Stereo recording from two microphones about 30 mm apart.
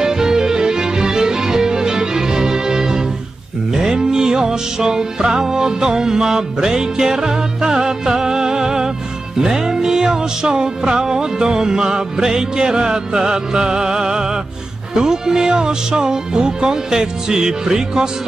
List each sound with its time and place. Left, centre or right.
0.0 s music: centre